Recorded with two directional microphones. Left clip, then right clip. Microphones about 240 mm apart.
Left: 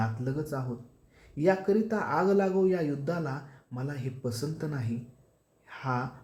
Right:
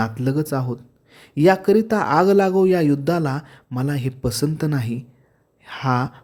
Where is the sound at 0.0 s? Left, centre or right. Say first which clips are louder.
Right 11 dB; right.